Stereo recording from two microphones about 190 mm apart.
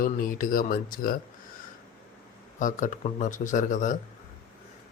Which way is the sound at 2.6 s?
40° left (ahead or behind).